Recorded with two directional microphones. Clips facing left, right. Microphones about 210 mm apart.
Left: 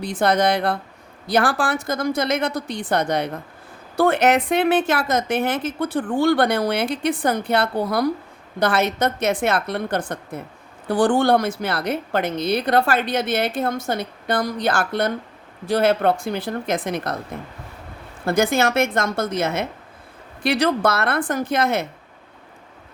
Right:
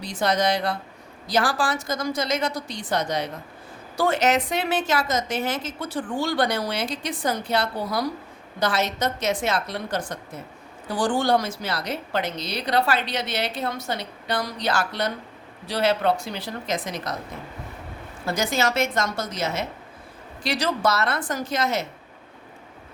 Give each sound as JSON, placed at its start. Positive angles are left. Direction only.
{"t": 0.0, "sound": "a woman's voice", "side_deg": 55}
{"t": 18.3, "sound": "a woman's voice", "side_deg": 55}